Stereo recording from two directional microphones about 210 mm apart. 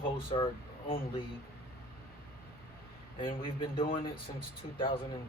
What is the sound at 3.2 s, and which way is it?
A man's voice, 20° left (ahead or behind).